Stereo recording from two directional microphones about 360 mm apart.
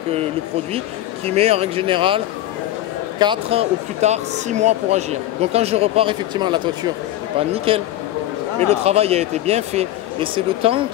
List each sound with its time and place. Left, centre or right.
1.2 s speech: centre
8.8 s speech: centre